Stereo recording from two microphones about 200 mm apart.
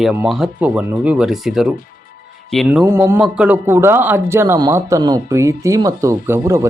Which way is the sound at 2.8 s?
10° right (ahead or behind).